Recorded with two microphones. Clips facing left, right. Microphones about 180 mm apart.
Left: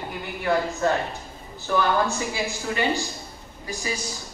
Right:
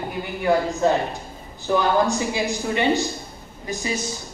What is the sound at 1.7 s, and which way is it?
A man's voice, 20° right (ahead or behind).